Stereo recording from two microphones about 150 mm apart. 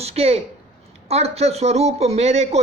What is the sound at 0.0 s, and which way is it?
A woman's voice, 45° right (ahead or behind).